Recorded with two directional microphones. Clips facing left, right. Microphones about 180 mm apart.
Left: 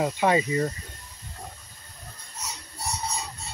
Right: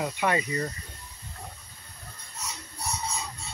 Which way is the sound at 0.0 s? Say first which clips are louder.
Left 5 dB; 25° left (ahead or behind).